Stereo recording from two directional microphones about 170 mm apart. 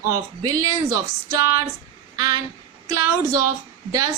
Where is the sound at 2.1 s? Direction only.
20° right (ahead or behind).